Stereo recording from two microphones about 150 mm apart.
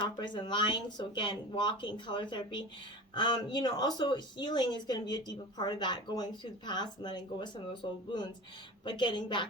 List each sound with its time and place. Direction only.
0.0 s speech: 30° left (ahead or behind)